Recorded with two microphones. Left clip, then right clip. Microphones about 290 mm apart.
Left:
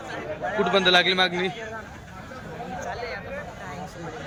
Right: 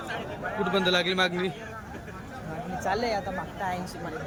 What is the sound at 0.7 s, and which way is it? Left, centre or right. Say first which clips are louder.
Speech: left 6 dB; centre.